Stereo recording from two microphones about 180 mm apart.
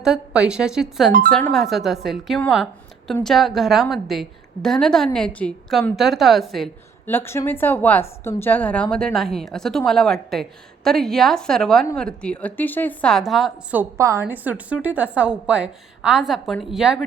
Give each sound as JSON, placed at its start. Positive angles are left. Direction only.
{"t": 0.0, "sound": "a woman's voice", "side_deg": -5}
{"t": 7.1, "sound": "a woman's voice", "side_deg": 15}